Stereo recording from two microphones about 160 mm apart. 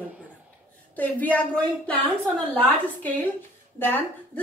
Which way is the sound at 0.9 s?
10° left (ahead or behind).